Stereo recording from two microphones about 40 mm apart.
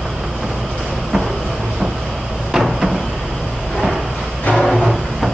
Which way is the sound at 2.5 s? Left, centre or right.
Centre.